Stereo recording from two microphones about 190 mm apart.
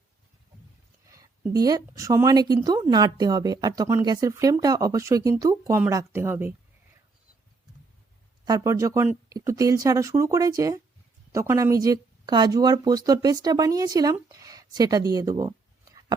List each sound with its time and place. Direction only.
1.6 s speech: 20° right (ahead or behind)
8.4 s speech: 20° right (ahead or behind)